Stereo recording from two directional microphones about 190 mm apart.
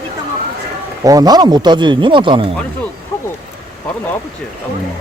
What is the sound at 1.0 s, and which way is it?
Speech, 20° right (ahead or behind).